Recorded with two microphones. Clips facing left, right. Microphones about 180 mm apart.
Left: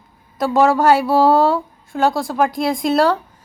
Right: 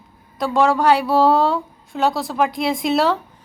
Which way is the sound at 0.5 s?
5° left (ahead or behind).